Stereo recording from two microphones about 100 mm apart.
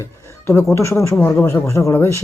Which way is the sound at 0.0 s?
25° left (ahead or behind).